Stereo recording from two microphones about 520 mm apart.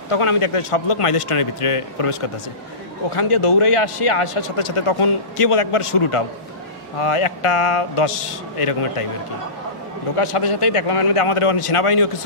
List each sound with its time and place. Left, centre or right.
0.1 s a man's voice: left
10.1 s a man's voice: left